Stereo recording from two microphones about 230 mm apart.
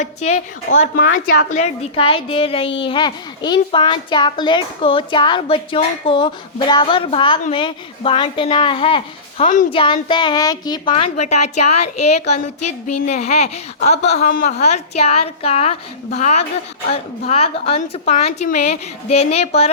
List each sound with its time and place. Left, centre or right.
0.0 s a child's voice: left
11.6 s speech: left
11.9 s a child's voice: left